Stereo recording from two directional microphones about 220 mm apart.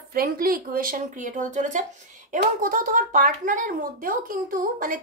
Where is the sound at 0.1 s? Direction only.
40° right (ahead or behind).